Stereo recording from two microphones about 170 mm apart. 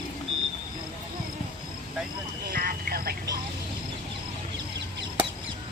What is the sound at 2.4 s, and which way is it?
Speech, 60° right (ahead or behind).